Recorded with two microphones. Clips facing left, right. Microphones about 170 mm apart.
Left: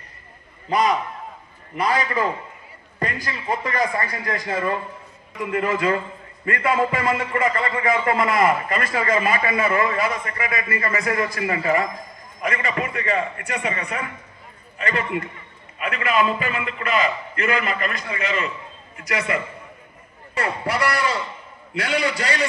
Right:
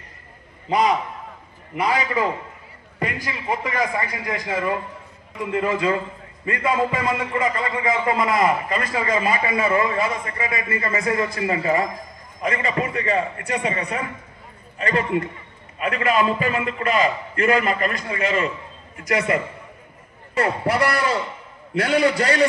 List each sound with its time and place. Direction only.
0.7 s a man's voice: 15° right (ahead or behind)
5.5 s a man's voice: 25° right (ahead or behind); by 19.4 s 40° right (ahead or behind)
20.8 s a man's voice: 50° right (ahead or behind)